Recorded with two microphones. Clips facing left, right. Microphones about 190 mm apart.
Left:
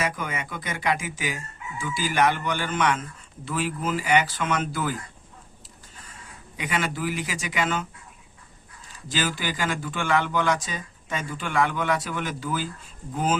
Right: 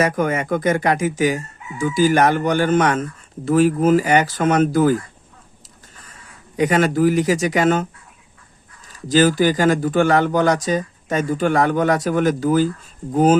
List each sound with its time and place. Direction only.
0.0 s speech: 45° right (ahead or behind)
6.6 s speech: 45° right (ahead or behind)
9.0 s speech: 40° right (ahead or behind)